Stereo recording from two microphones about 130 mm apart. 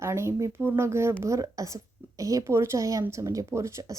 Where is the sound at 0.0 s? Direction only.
20° right (ahead or behind).